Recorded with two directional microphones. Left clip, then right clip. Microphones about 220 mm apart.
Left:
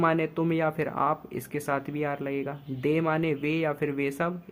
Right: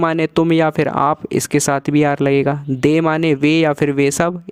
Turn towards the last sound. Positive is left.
turn(degrees=-50)  # may be behind; listen again after turning